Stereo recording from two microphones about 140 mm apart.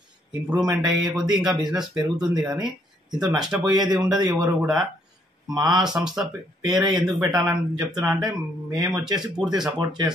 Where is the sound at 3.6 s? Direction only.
30° right (ahead or behind).